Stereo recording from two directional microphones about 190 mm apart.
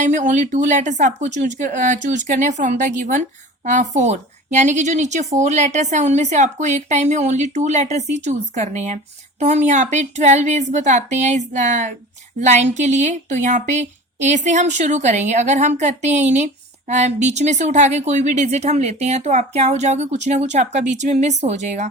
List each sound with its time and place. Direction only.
0.0 s speech: 40° right (ahead or behind)